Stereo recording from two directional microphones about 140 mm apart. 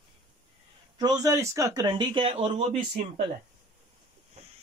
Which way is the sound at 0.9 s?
25° right (ahead or behind).